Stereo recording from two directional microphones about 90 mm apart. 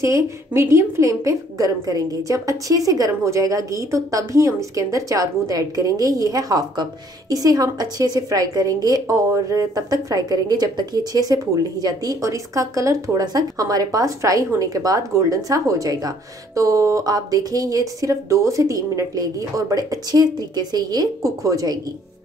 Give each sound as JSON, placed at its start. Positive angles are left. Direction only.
{"t": 0.0, "sound": "a woman's voice", "side_deg": -30}
{"t": 21.2, "sound": "a woman's voice", "side_deg": -35}